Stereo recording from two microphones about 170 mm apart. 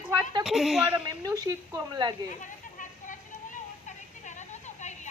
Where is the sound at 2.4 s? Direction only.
50° left (ahead or behind).